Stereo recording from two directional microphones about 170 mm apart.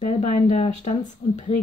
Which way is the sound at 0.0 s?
45° left (ahead or behind).